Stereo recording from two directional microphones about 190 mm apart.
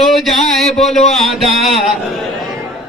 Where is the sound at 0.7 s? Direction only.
35° left (ahead or behind).